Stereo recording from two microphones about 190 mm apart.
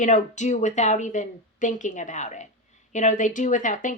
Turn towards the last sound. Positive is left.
turn(degrees=40)  # may be behind; listen again after turning